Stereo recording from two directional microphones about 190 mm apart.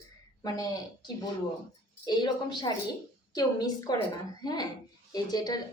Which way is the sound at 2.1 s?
20° left (ahead or behind).